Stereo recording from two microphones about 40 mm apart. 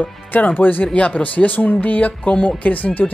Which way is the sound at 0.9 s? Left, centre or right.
Left.